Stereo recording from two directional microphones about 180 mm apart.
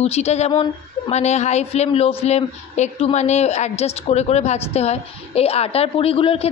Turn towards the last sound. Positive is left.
turn(degrees=30)  # may be behind; listen again after turning